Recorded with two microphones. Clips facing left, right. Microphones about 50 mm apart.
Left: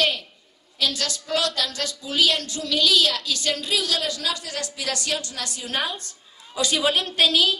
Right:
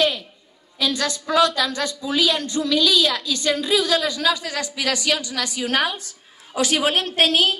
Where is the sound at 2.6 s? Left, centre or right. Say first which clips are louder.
Right 8 dB; right.